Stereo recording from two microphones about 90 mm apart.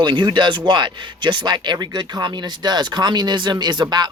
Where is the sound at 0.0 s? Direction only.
55° right (ahead or behind).